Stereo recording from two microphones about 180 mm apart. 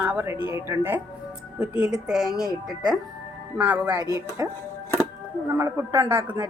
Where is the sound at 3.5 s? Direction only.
5° right (ahead or behind).